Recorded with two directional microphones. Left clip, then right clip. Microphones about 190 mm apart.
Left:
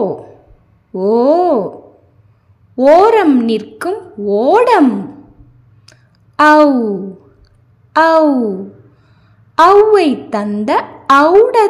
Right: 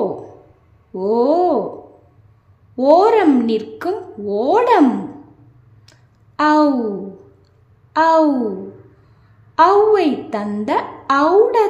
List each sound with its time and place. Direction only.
0.9 s a woman's voice: 15° left (ahead or behind)
2.7 s a woman's voice: 15° left (ahead or behind)
5.9 s a sound: 20° left (ahead or behind)
7.9 s a woman's voice: 15° left (ahead or behind)
9.6 s a woman's voice: 20° left (ahead or behind)